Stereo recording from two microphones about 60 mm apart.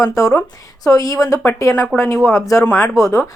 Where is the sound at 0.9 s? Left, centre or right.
Left.